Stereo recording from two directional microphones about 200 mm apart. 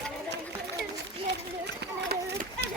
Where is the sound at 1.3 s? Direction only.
55° right (ahead or behind).